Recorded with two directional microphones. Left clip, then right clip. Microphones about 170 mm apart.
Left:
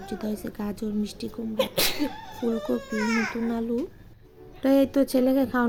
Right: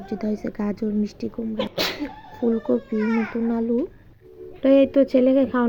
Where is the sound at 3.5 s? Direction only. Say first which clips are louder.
Right 5 dB; 10° right (ahead or behind).